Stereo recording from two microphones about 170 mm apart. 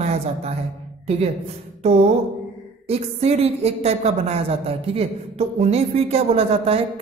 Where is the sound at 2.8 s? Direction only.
35° right (ahead or behind).